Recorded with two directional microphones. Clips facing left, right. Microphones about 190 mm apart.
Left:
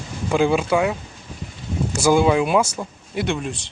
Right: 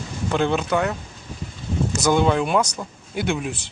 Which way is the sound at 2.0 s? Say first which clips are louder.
Left 3 dB; 10° left (ahead or behind).